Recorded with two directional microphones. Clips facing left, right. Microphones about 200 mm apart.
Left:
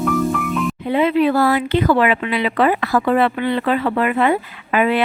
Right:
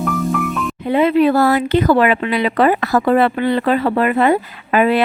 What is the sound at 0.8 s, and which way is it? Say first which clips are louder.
Speech: right 4 dB; 45° right (ahead or behind).